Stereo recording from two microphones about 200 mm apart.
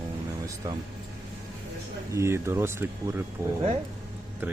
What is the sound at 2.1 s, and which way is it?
Speech, 15° right (ahead or behind).